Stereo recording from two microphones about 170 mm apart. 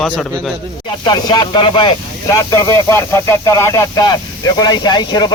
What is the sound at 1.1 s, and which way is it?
Speech, 25° left (ahead or behind).